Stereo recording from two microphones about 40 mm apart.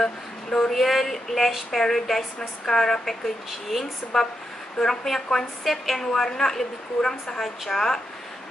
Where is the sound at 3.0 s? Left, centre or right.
Centre.